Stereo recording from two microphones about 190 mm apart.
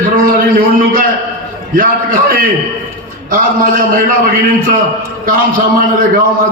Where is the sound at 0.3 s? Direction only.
50° right (ahead or behind).